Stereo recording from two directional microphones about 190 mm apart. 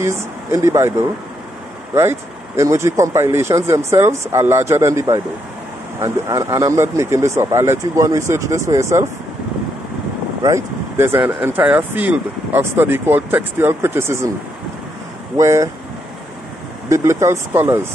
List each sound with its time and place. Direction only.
0.0 s speech: 15° right (ahead or behind)
10.4 s speech: 15° right (ahead or behind)
15.3 s speech: 15° right (ahead or behind)
16.9 s speech: 15° right (ahead or behind)